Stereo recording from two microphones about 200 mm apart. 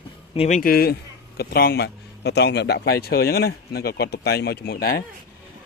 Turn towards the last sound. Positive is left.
turn(degrees=50)  # may be behind; listen again after turning